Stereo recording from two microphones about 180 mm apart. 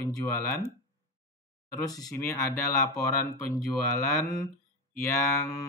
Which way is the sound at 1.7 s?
20° left (ahead or behind).